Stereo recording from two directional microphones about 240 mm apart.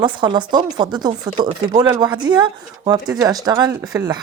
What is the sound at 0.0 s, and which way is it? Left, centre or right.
Speech, centre.